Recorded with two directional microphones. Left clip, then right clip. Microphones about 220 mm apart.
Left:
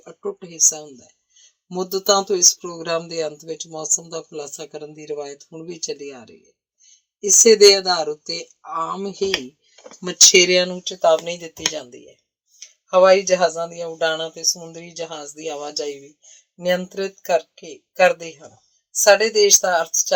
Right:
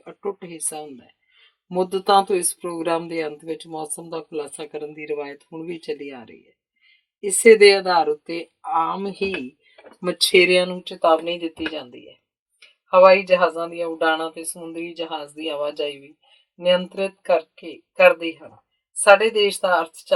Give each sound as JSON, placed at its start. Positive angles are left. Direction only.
{"t": 0.0, "sound": "speech", "side_deg": 35}